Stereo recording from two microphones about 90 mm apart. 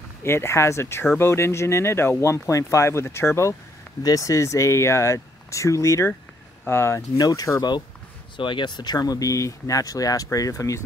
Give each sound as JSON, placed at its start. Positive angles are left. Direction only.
{"t": 0.2, "sound": "speech", "side_deg": 30}
{"t": 7.2, "sound": "speech", "side_deg": 45}
{"t": 8.4, "sound": "speech", "side_deg": 60}